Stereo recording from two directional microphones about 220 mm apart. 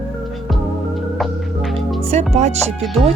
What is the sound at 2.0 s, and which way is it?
Speech, 30° right (ahead or behind).